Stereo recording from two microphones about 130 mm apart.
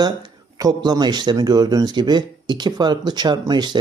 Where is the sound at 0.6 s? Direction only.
30° right (ahead or behind).